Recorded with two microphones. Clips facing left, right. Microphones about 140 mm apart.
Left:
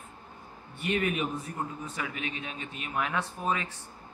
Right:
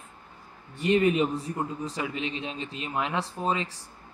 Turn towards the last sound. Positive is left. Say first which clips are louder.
# right 3 dB
turn(degrees=-25)  # may be behind; listen again after turning